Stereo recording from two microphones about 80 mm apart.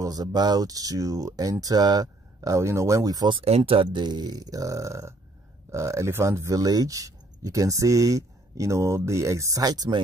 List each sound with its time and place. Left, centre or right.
0.0 s speech: right
3.3 s speech: right